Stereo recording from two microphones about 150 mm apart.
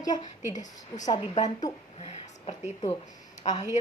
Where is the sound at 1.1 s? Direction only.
25° left (ahead or behind).